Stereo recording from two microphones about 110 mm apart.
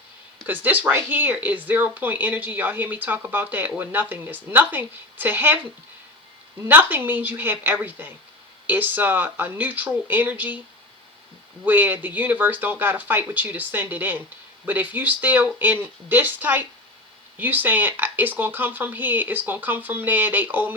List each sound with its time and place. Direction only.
0.4 s speech: 15° right (ahead or behind)
6.7 s speech: 20° right (ahead or behind)
11.6 s speech: 15° right (ahead or behind)